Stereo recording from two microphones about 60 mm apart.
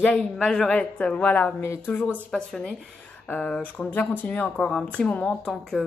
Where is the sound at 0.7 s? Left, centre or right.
Left.